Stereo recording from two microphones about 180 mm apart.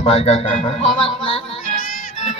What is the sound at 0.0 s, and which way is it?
Speech, 35° left (ahead or behind).